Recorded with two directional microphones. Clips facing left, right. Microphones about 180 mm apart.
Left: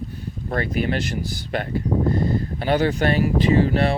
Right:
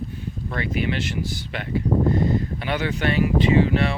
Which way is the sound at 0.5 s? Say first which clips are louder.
Left 3 dB; 45° left (ahead or behind).